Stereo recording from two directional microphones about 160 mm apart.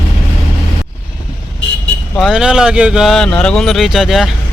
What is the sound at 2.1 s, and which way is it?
Speech, centre (ahead or behind).